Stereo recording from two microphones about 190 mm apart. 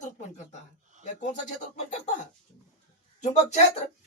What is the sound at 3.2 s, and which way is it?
Speech, 35° left (ahead or behind).